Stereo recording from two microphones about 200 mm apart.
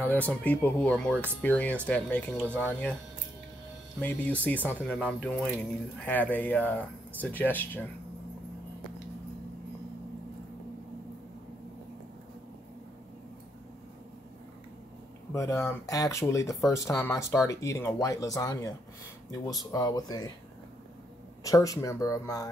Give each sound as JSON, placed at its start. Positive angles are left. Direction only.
{"t": 0.3, "sound": "speech", "side_deg": 5}
{"t": 4.0, "sound": "speech", "side_deg": 10}
{"t": 15.3, "sound": "speech", "side_deg": 15}
{"t": 21.5, "sound": "speech", "side_deg": 15}